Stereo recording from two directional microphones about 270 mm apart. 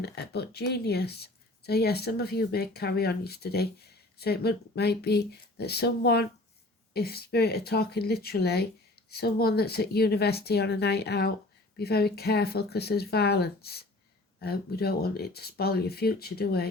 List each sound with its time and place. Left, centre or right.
0.0 s speech: left